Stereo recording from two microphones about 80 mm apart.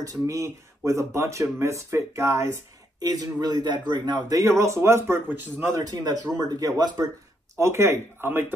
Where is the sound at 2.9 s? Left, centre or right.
Right.